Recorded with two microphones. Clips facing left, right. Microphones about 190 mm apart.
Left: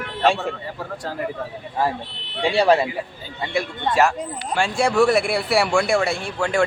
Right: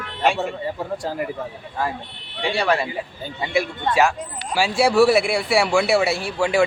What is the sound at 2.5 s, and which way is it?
Speech, 25° left (ahead or behind).